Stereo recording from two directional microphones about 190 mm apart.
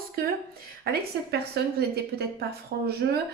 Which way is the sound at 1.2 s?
60° right (ahead or behind).